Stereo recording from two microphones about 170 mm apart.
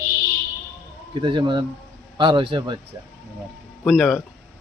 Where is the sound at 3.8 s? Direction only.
Centre (ahead or behind).